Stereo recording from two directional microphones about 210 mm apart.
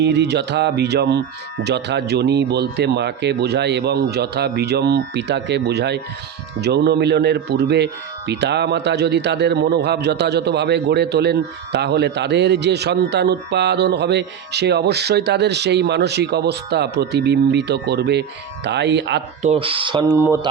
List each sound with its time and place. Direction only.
0.0 s a man's voice: 55° right (ahead or behind)
19.4 s speech: 30° right (ahead or behind); by 20.5 s 15° right (ahead or behind)